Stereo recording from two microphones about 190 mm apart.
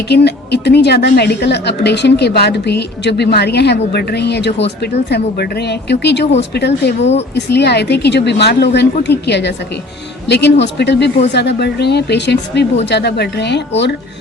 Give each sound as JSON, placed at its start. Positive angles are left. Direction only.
{"t": 0.1, "sound": "a woman's voice", "side_deg": 60}